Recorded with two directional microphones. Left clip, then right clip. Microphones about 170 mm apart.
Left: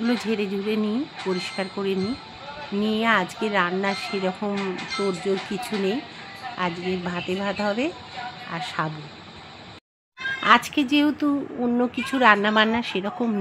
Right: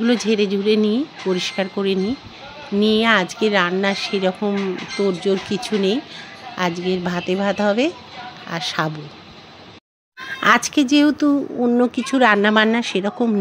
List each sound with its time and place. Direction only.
0.0 s speech: 35° right (ahead or behind)
10.4 s speech: 35° right (ahead or behind)